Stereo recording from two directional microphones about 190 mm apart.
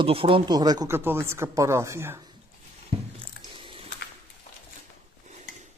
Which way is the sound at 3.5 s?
30° right (ahead or behind).